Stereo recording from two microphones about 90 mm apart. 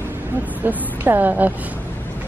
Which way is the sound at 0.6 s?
20° right (ahead or behind).